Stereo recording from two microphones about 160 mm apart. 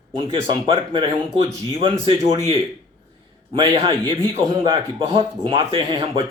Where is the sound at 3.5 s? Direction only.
30° right (ahead or behind).